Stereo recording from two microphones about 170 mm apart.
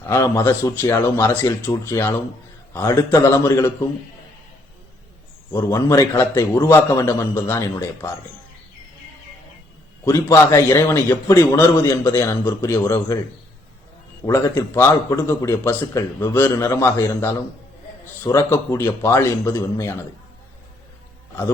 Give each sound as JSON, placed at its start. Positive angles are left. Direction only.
{"t": 0.0, "sound": "a man's voice", "side_deg": 15}
{"t": 5.5, "sound": "a man's voice", "side_deg": 15}
{"t": 10.0, "sound": "a man's voice", "side_deg": 20}
{"t": 14.3, "sound": "a man's voice", "side_deg": 15}